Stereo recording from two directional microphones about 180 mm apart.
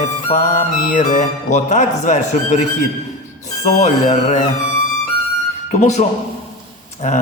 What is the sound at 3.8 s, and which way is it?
Speech, 40° left (ahead or behind).